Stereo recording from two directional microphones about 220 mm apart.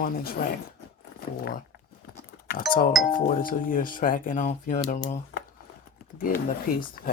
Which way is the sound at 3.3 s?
40° left (ahead or behind).